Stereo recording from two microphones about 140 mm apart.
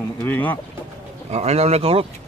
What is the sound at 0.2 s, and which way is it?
Speech, 10° left (ahead or behind).